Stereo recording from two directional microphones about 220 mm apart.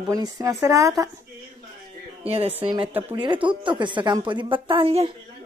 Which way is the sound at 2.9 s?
10° right (ahead or behind).